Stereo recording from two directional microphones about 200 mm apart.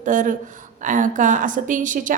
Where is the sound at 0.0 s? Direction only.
40° right (ahead or behind).